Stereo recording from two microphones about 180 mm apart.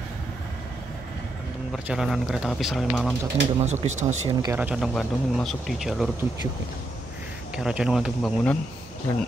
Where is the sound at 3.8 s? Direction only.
40° right (ahead or behind).